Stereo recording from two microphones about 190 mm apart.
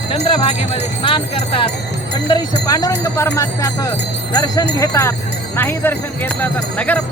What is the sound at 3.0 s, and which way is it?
Speech, 15° left (ahead or behind).